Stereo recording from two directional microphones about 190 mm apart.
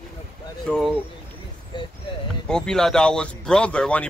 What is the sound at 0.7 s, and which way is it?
Speech, centre (ahead or behind).